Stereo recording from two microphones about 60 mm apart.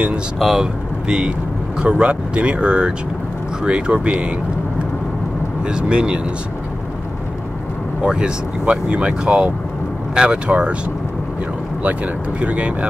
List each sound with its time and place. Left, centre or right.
0.4 s speech: centre
5.7 s speech: centre
8.0 s speech: centre
12.4 s speech: right